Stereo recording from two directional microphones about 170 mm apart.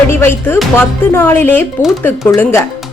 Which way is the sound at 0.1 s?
15° left (ahead or behind).